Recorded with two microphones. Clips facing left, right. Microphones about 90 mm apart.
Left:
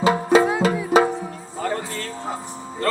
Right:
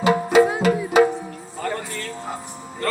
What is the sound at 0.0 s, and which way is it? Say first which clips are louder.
Music: right 1 dB; 30° left (ahead or behind).